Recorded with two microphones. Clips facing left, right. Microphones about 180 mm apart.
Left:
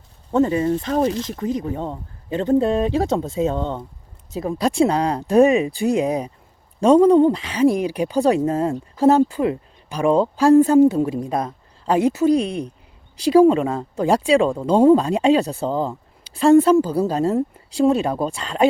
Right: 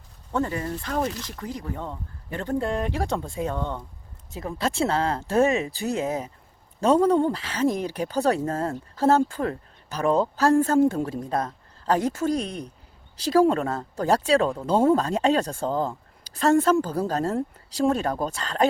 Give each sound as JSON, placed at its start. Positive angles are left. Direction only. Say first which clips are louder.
{"t": 0.3, "sound": "speech", "louder": "left 9 dB", "side_deg": 20}